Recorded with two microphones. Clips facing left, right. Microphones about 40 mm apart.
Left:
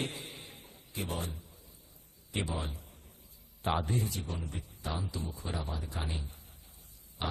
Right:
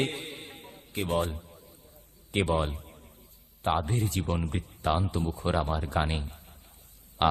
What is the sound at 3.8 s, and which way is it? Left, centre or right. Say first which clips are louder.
A man's voice: right 4 dB; right.